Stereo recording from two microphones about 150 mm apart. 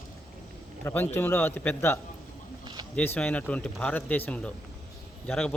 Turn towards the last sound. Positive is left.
turn(degrees=5)  # may be behind; listen again after turning